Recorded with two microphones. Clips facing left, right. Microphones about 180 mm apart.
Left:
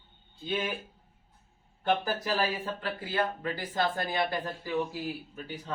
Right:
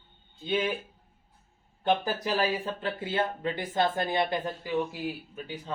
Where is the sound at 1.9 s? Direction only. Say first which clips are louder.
Right 2 dB; 15° right (ahead or behind).